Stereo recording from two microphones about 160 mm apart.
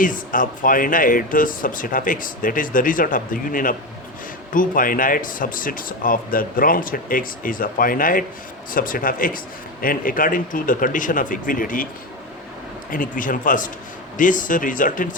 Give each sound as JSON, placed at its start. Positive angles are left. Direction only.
{"t": 0.0, "sound": "speech", "side_deg": 55}
{"t": 12.9, "sound": "speech", "side_deg": 55}